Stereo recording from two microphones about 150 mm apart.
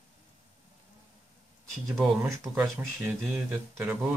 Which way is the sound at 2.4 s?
10° right (ahead or behind).